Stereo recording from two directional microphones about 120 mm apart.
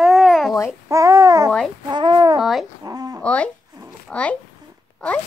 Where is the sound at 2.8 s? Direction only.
35° right (ahead or behind).